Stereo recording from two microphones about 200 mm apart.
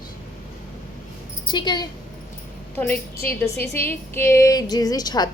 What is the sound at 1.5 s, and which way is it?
Speech, 20° left (ahead or behind).